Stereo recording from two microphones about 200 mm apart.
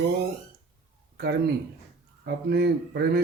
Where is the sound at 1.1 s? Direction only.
55° right (ahead or behind).